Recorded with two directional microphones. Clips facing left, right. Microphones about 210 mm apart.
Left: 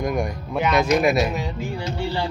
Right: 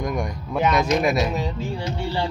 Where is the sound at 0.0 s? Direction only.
5° left (ahead or behind).